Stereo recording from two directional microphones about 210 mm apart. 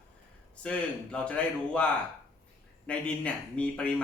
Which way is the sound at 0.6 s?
5° left (ahead or behind).